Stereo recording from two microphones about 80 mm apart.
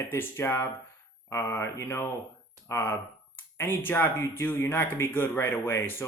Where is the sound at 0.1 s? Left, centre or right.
Left.